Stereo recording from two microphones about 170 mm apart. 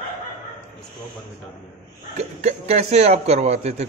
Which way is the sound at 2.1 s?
40° right (ahead or behind).